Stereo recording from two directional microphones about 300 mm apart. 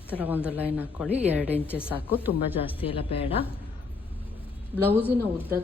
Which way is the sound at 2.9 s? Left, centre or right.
Centre.